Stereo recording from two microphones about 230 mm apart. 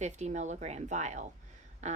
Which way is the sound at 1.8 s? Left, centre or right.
Right.